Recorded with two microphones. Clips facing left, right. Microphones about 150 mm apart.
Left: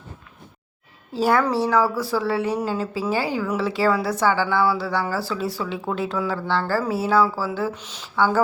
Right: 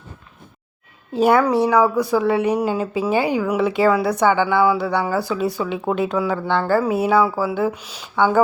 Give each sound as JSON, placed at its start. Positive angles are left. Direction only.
{"t": 1.1, "sound": "a woman's voice", "side_deg": -20}